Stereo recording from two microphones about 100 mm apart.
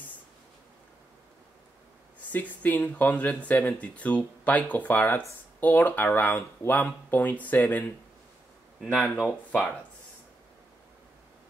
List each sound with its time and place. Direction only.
2.3 s speech: 15° left (ahead or behind)